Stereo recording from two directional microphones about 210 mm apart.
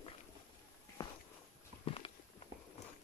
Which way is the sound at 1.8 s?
25° left (ahead or behind).